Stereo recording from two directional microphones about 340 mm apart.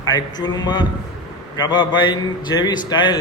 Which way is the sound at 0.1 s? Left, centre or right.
Centre.